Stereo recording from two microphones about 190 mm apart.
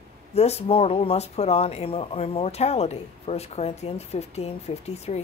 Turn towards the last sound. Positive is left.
turn(degrees=35)  # may be behind; listen again after turning